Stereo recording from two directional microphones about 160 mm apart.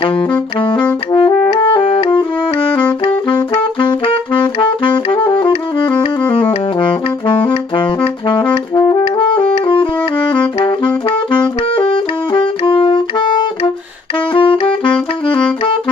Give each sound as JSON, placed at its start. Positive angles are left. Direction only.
{"t": 0.6, "sound": "brass instrument", "side_deg": 30}
{"t": 1.5, "sound": "music", "side_deg": 35}
{"t": 3.5, "sound": "saxophone", "side_deg": 30}
{"t": 6.8, "sound": "brass instrument", "side_deg": 30}
{"t": 8.7, "sound": "music", "side_deg": 30}
{"t": 11.1, "sound": "saxophone", "side_deg": 30}